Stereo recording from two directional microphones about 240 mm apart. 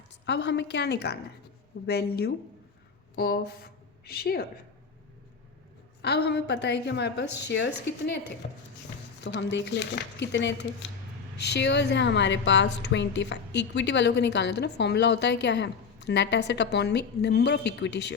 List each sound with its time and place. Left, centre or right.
0.3 s a woman's voice: left
6.0 s a woman's voice: left